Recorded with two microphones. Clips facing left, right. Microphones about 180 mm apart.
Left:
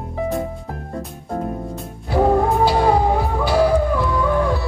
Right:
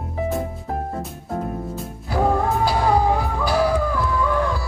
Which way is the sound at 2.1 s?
25° left (ahead or behind).